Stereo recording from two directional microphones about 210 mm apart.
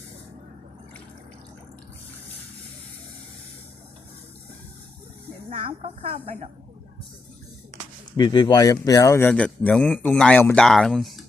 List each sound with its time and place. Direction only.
5.5 s speech: 30° right (ahead or behind)
8.1 s speech: 20° left (ahead or behind); by 11.3 s centre (ahead or behind)